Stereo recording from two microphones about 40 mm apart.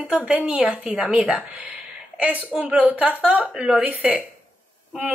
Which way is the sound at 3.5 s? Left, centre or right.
Centre.